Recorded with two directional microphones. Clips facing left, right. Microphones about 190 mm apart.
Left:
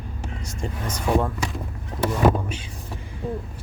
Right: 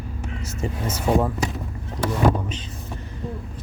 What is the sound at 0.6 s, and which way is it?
Speech, 5° right (ahead or behind).